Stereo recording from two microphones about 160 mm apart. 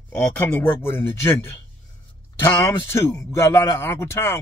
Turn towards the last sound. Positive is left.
turn(degrees=15)  # may be behind; listen again after turning